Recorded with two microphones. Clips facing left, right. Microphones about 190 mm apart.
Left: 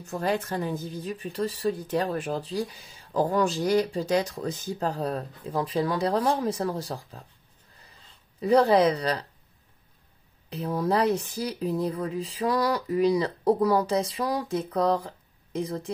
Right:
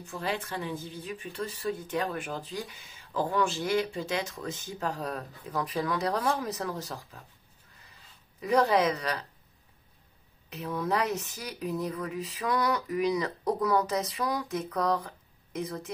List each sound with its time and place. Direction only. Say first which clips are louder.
0.0 s a woman's voice: left 6 dB; 45° left (ahead or behind)
8.4 s a woman's voice: left 5 dB; 35° left (ahead or behind)
10.5 s a woman's voice: left 5 dB; 35° left (ahead or behind)